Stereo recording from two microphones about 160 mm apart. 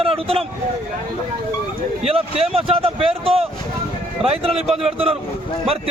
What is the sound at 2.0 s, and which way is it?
Speech, 40° right (ahead or behind).